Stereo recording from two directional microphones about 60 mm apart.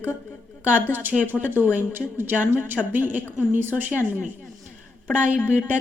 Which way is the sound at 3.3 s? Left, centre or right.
Right.